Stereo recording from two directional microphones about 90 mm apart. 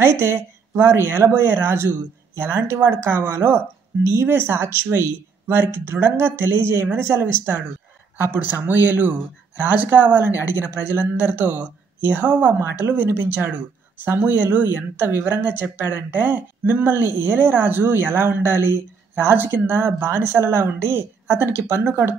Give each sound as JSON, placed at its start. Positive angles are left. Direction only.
{"t": 0.0, "sound": "speech", "side_deg": -30}